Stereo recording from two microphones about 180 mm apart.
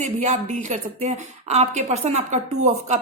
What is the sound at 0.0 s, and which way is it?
A woman's voice, 40° right (ahead or behind).